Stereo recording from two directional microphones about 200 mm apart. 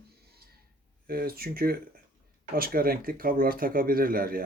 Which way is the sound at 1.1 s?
50° right (ahead or behind).